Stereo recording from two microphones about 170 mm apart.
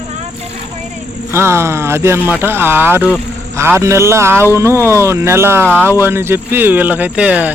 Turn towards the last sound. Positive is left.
turn(degrees=-10)  # may be behind; listen again after turning